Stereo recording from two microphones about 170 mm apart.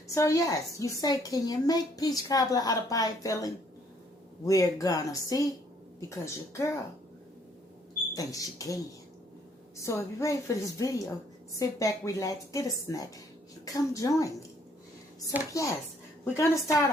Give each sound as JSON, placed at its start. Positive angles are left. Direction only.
{"t": 0.1, "sound": "a woman's voice", "side_deg": 20}
{"t": 8.1, "sound": "a woman's voice", "side_deg": 20}
{"t": 15.3, "sound": "speech", "side_deg": -10}
{"t": 16.2, "sound": "a woman's voice", "side_deg": 15}